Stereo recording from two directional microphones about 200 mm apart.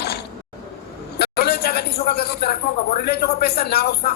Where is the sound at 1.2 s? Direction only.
50° left (ahead or behind).